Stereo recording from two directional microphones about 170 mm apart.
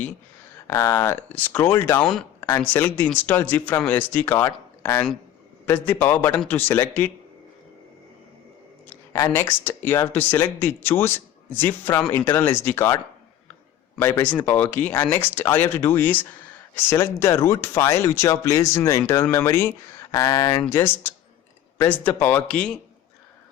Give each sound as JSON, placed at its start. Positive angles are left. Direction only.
{"t": 0.7, "sound": "speech", "side_deg": 15}
{"t": 9.1, "sound": "speech", "side_deg": 15}
{"t": 14.0, "sound": "speech", "side_deg": 10}